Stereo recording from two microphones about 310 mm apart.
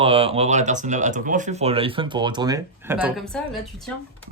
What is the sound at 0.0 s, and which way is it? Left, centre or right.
Speech, centre.